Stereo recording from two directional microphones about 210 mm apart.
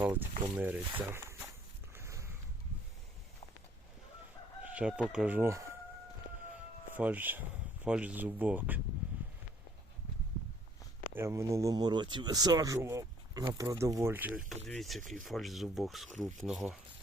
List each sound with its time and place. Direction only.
0.0 s speech: 10° right (ahead or behind)
1.9 s a sound: 10° right (ahead or behind)
4.6 s speech: 5° right (ahead or behind)
6.9 s speech: 10° right (ahead or behind)
11.1 s speech: 10° right (ahead or behind)